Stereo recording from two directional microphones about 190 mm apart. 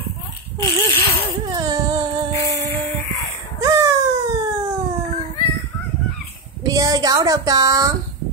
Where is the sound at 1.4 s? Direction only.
20° right (ahead or behind).